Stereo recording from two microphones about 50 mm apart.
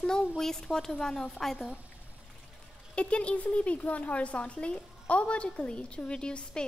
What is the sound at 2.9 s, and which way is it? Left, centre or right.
A woman's voice, left.